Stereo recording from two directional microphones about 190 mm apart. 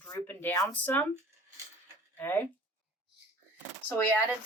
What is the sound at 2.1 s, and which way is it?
Speech, 10° left (ahead or behind).